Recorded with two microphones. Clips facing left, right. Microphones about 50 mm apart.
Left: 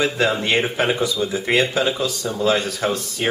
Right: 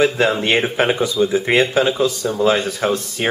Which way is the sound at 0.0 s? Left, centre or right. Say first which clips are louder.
Right 4 dB; centre.